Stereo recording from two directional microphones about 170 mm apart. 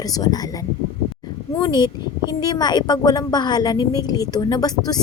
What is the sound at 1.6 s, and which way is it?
A woman's voice, 25° left (ahead or behind).